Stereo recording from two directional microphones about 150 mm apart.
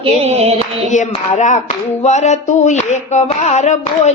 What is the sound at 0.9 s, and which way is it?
Speech, 55° left (ahead or behind).